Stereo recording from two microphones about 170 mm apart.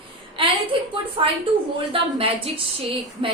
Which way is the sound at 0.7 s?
30° right (ahead or behind).